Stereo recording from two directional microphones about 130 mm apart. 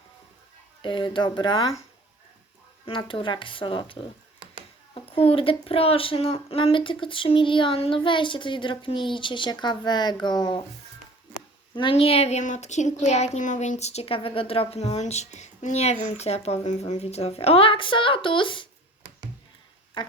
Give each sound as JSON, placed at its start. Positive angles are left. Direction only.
{"t": 0.8, "sound": "a woman's voice", "side_deg": 40}
{"t": 2.8, "sound": "a woman's voice", "side_deg": 40}
{"t": 5.1, "sound": "a woman's voice", "side_deg": 45}
{"t": 11.7, "sound": "speech", "side_deg": 40}
{"t": 20.0, "sound": "speech", "side_deg": 35}